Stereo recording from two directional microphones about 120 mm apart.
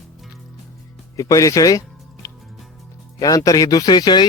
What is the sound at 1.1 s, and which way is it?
Speech, 25° left (ahead or behind).